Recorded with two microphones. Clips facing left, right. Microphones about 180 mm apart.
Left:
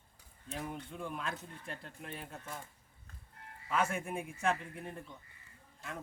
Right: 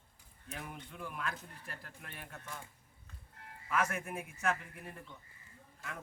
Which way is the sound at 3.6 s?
30° left (ahead or behind).